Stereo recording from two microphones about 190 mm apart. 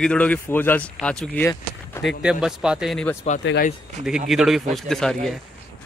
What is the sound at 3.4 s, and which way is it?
Speech, 75° left (ahead or behind).